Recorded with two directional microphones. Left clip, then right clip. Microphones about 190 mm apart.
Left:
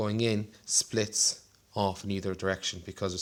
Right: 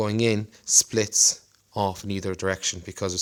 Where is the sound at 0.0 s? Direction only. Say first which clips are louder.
Right 6 dB; 40° right (ahead or behind).